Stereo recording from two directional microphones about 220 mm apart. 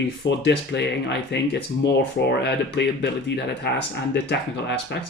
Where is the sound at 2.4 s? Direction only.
50° left (ahead or behind).